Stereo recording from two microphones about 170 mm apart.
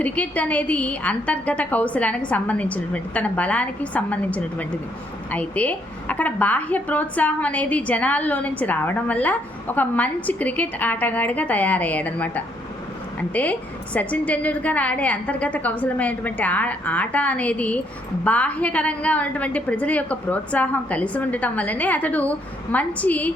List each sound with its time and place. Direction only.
0.0 s a woman's voice: 10° left (ahead or behind)